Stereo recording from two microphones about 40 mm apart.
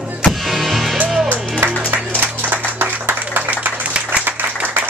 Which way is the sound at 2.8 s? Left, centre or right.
Right.